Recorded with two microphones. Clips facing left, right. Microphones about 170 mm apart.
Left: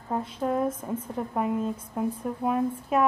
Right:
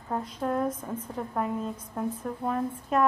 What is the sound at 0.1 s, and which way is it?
A woman's voice, 5° left (ahead or behind).